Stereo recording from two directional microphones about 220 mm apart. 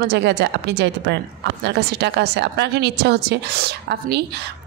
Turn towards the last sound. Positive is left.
turn(degrees=-50)  # may be behind; listen again after turning